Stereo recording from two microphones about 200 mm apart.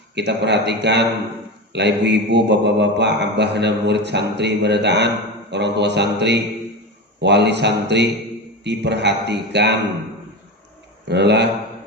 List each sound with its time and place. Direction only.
0.1 s a man's voice: 60° right (ahead or behind)
11.1 s a man's voice: 60° right (ahead or behind)